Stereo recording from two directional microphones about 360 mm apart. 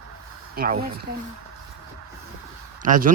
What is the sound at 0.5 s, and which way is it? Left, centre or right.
Speech, right.